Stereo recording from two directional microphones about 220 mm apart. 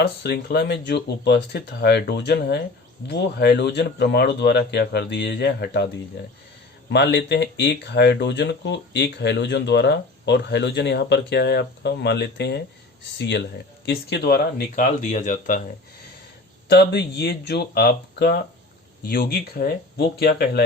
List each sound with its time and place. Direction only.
0.2 s speech: 45° left (ahead or behind)
6.9 s speech: 50° left (ahead or behind)
14.8 s speech: 35° left (ahead or behind)
16.6 s speech: 50° left (ahead or behind)